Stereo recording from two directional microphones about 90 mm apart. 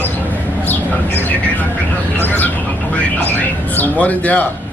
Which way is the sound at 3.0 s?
20° left (ahead or behind).